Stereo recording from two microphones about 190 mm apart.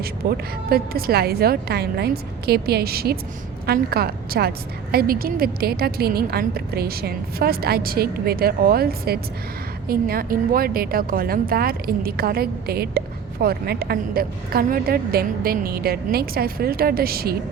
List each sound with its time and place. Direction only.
0.0 s a woman's voice: 50° right (ahead or behind)